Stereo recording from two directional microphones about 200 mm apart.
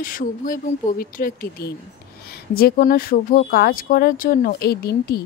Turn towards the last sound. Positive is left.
turn(degrees=50)  # may be behind; listen again after turning